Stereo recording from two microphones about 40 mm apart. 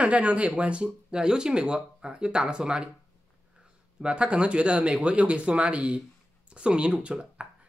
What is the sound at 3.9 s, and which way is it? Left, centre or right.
Speech, right.